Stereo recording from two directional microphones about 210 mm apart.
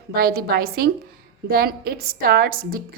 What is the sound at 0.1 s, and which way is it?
A woman's voice, 45° right (ahead or behind).